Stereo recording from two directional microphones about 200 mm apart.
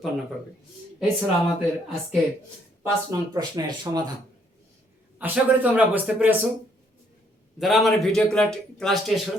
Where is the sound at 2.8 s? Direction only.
15° right (ahead or behind).